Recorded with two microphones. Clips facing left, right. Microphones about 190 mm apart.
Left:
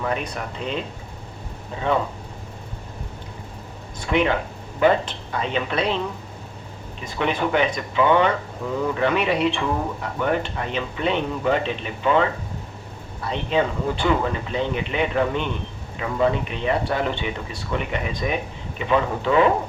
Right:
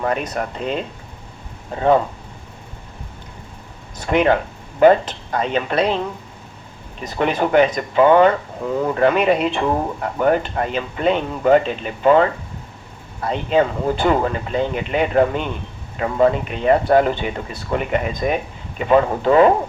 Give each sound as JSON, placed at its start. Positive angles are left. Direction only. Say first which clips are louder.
{"t": 0.0, "sound": "speech", "louder": "right 5 dB", "side_deg": -45}
{"t": 4.0, "sound": "speech", "louder": "right 5 dB", "side_deg": -45}
{"t": 7.1, "sound": "speech", "louder": "right 5 dB", "side_deg": -45}
{"t": 13.2, "sound": "speech", "louder": "right 5 dB", "side_deg": -45}